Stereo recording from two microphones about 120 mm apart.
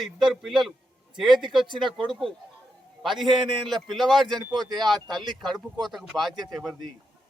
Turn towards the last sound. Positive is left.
turn(degrees=5)  # may be behind; listen again after turning